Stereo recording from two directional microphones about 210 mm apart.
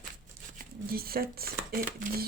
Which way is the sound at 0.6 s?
45° right (ahead or behind).